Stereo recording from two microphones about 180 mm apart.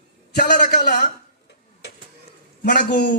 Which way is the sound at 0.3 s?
45° left (ahead or behind).